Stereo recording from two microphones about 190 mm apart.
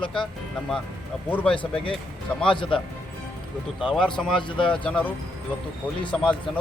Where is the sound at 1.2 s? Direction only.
10° left (ahead or behind).